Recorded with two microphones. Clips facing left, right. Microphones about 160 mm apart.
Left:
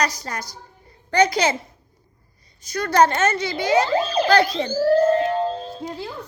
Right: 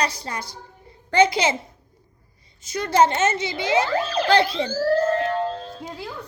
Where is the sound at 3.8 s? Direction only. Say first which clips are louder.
Left 3 dB; 20° left (ahead or behind).